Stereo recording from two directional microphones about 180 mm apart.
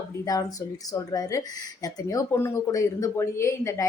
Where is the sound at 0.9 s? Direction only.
20° left (ahead or behind).